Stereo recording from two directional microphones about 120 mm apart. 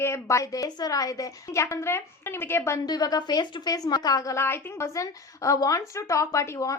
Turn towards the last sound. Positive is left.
turn(degrees=25)  # may be behind; listen again after turning